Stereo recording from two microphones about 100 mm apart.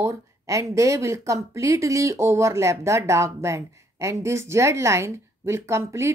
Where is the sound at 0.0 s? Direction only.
30° right (ahead or behind).